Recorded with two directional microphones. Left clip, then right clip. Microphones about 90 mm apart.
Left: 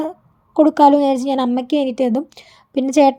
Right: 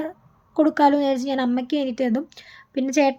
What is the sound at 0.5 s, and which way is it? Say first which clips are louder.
A woman's voice: left 6 dB; 40° left (ahead or behind).